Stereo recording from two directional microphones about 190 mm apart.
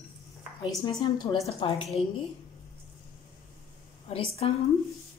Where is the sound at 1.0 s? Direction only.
20° left (ahead or behind).